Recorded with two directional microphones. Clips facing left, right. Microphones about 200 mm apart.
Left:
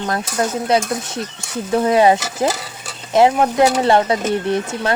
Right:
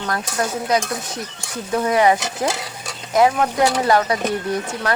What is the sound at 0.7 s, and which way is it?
Speech, 25° left (ahead or behind).